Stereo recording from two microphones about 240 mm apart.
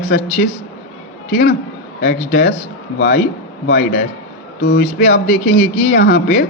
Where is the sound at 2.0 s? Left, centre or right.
Left.